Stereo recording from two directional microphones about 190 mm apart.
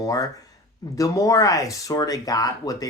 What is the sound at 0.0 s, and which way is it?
Speech, 20° left (ahead or behind).